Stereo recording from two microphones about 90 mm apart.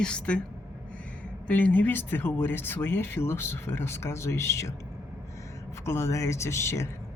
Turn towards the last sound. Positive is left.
turn(degrees=30)  # may be behind; listen again after turning